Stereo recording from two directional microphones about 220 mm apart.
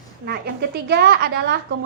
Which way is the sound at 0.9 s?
45° right (ahead or behind).